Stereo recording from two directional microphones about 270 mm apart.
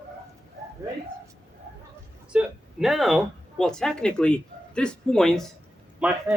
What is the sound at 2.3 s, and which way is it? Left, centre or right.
A man's voice, centre.